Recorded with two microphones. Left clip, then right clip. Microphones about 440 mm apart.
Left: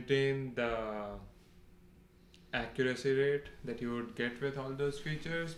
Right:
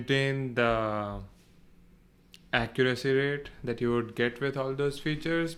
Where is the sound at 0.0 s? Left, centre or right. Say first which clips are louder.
Right 3 dB; right.